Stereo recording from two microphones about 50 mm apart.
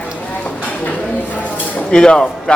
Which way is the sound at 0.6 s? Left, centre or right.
Left.